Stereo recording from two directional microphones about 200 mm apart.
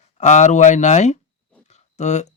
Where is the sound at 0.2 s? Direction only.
35° left (ahead or behind).